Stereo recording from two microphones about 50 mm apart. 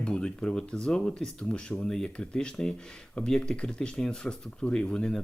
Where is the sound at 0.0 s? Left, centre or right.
Centre.